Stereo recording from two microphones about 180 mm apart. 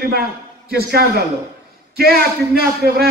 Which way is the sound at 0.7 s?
60° right (ahead or behind).